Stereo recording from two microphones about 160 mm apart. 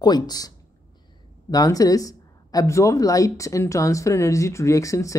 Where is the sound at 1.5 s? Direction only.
25° left (ahead or behind).